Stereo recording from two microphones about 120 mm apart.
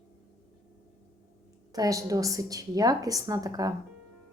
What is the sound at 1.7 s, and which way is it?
A woman's voice, 30° right (ahead or behind).